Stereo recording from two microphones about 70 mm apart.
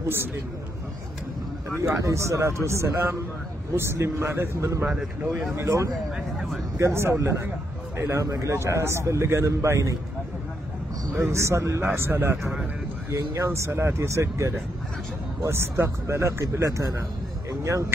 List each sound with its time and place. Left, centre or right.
1.8 s a man's voice: right
11.2 s a man's voice: right
11.8 s a man's voice: right
13.1 s speech: right
17.5 s vehicle: right